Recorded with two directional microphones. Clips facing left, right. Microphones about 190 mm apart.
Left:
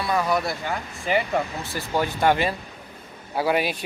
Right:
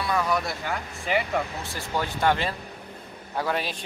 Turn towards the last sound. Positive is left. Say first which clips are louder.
# left 5 dB
turn(degrees=10)  # may be behind; listen again after turning